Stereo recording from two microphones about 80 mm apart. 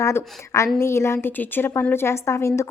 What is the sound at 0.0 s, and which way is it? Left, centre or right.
A woman's voice, left.